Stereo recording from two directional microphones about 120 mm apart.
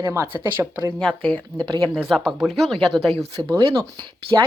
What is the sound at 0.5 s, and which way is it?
Speech, 15° right (ahead or behind).